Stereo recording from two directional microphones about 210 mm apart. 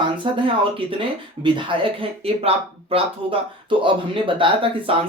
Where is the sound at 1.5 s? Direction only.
25° right (ahead or behind).